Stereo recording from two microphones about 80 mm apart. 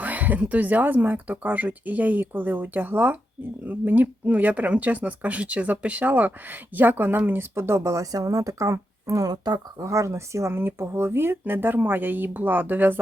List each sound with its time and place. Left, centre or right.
0.0 s speech: centre; by 9.6 s right
9.8 s speech: right